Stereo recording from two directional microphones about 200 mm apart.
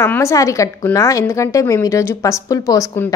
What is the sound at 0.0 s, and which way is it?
A woman's voice, 15° left (ahead or behind).